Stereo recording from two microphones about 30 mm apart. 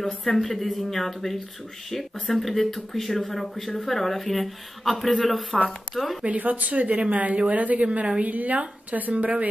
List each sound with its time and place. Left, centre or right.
0.3 s speech: centre
6.2 s a woman's voice: right
9.1 s a woman's voice: right